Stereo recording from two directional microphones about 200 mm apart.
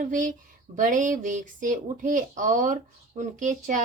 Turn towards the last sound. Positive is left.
turn(degrees=-40)  # may be behind; listen again after turning